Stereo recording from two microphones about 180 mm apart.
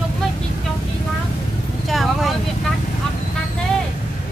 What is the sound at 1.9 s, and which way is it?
Speech, centre (ahead or behind).